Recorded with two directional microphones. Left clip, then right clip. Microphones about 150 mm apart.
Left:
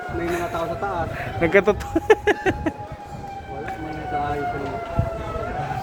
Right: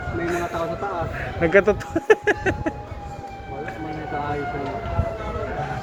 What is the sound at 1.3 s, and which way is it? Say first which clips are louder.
Speech: right 1 dB; 25° left (ahead or behind).